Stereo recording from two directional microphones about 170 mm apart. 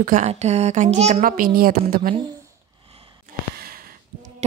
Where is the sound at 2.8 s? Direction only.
35° right (ahead or behind).